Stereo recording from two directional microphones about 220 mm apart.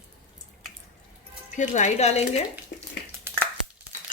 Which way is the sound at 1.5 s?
35° left (ahead or behind).